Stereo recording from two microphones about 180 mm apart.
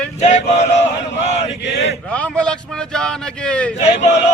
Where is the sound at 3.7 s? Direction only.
40° left (ahead or behind).